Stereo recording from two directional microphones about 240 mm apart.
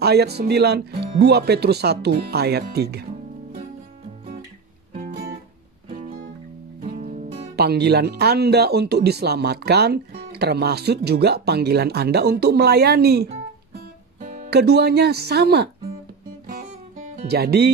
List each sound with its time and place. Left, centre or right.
0.0 s speech: right
4.9 s music: right
6.8 s music: right
7.5 s speech: right
17.1 s speech: right